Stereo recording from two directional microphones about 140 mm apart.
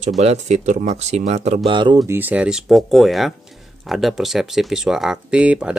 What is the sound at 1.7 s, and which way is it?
Speech, 35° right (ahead or behind).